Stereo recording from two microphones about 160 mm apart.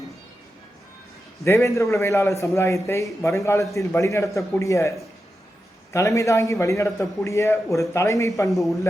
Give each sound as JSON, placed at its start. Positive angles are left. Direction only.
{"t": 1.5, "sound": "a man's voice", "side_deg": 20}
{"t": 8.4, "sound": "a man's voice", "side_deg": 0}